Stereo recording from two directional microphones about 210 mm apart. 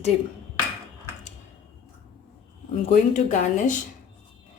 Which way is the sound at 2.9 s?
35° left (ahead or behind).